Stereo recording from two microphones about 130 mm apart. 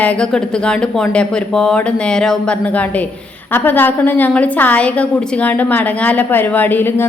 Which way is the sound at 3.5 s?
15° left (ahead or behind).